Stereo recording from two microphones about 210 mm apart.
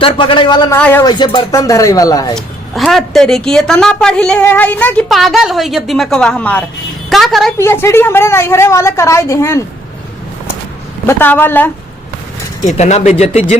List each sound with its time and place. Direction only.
0.0 s a man's voice: 25° left (ahead or behind)
0.8 s a woman's voice: 5° left (ahead or behind)
1.0 s a woman's voice: 20° left (ahead or behind)
2.3 s a woman's voice: centre (ahead or behind)
7.6 s a woman's voice: 10° left (ahead or behind)
11.0 s a woman's voice: 10° left (ahead or behind)
12.6 s speech: 35° left (ahead or behind)